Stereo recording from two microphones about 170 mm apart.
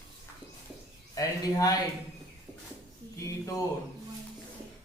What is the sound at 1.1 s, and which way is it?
Speech, 20° left (ahead or behind).